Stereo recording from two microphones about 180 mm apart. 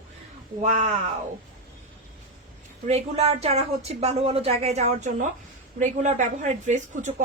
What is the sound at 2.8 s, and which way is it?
Speech, 35° right (ahead or behind).